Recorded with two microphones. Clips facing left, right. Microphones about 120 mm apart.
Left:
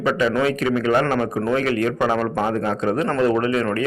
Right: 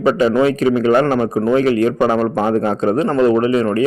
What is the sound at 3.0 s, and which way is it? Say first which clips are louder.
Speech: right 5 dB; 20° right (ahead or behind).